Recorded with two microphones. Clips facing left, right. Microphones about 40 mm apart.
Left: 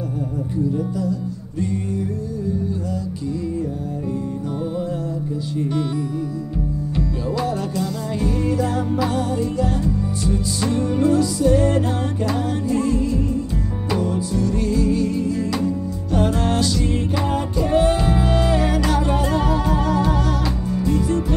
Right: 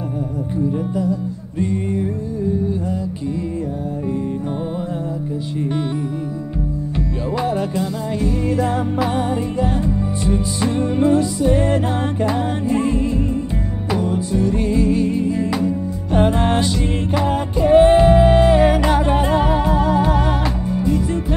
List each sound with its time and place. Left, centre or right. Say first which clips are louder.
0.7 s music: right 4 dB; right
7.0 s music: right 2 dB; right